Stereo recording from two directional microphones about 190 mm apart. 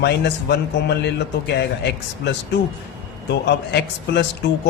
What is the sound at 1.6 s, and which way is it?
Speech, 65° left (ahead or behind).